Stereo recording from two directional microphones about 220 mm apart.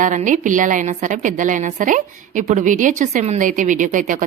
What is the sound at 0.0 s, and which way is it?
A woman's voice, 35° right (ahead or behind).